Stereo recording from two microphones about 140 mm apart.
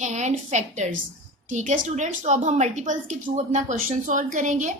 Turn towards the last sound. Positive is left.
turn(degrees=-60)  # may be behind; listen again after turning